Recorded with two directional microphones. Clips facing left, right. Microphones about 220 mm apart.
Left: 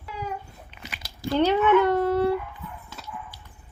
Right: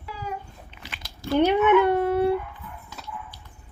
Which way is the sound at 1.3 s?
20° right (ahead or behind).